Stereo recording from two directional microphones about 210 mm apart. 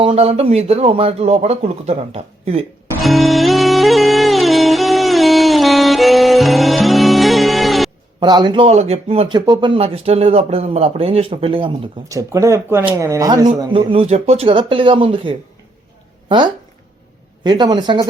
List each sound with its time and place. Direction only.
0.0 s speech: 30° right (ahead or behind)
3.0 s music: centre (ahead or behind)
8.2 s speech: 20° right (ahead or behind)
17.4 s speech: 20° right (ahead or behind)